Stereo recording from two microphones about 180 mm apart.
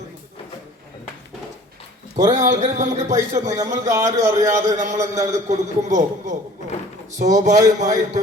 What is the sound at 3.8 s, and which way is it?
Speech, 15° right (ahead or behind).